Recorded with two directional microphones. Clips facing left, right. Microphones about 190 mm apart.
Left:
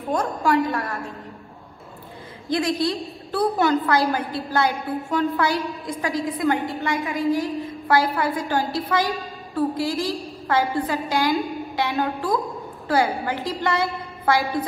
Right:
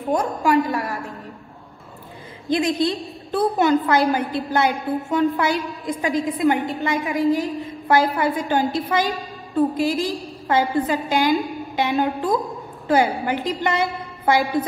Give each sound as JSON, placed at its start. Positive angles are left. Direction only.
{"t": 0.2, "sound": "a woman's voice", "side_deg": -20}
{"t": 2.5, "sound": "a woman's voice", "side_deg": -20}